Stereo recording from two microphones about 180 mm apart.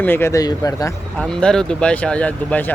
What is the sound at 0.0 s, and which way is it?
Speech, 10° left (ahead or behind).